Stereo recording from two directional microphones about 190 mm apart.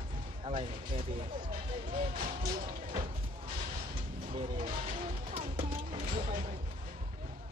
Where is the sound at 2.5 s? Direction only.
45° right (ahead or behind).